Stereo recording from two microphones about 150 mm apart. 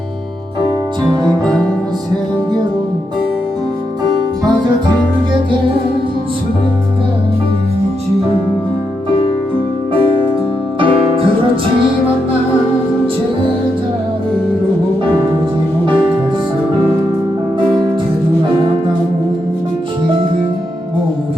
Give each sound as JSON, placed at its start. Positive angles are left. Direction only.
{"t": 10.8, "sound": "music", "side_deg": -35}